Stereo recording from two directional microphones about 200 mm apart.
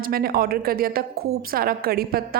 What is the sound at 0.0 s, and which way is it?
A woman's voice, 50° right (ahead or behind).